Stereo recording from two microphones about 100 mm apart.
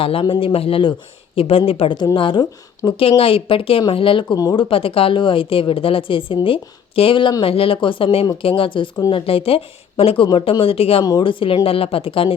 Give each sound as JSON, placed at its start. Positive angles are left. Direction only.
{"t": 0.0, "sound": "a woman's voice", "side_deg": 65}
{"t": 2.1, "sound": "a woman's voice", "side_deg": 55}
{"t": 7.4, "sound": "a woman's voice", "side_deg": 70}
{"t": 11.2, "sound": "a woman's voice", "side_deg": 60}